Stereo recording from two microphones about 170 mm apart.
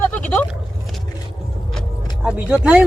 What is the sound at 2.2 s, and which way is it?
Speech, 5° right (ahead or behind).